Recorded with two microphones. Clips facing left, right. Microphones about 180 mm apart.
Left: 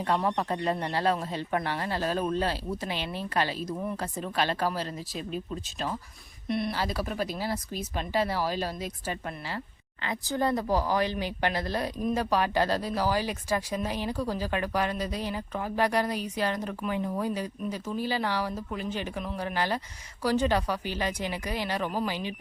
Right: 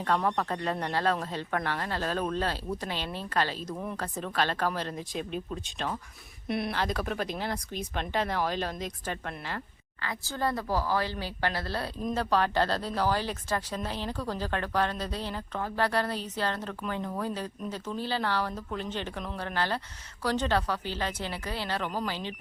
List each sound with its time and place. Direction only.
0.0 s speech: 10° left (ahead or behind)
6.5 s speech: centre (ahead or behind)
10.0 s speech: 20° left (ahead or behind)